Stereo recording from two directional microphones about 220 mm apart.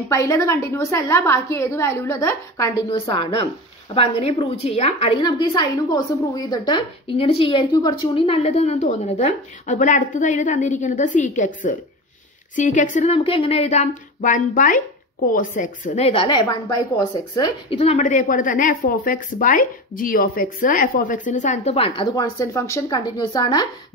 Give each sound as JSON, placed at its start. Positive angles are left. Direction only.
{"t": 0.1, "sound": "a woman's voice", "side_deg": 15}
{"t": 17.7, "sound": "a woman's voice", "side_deg": 30}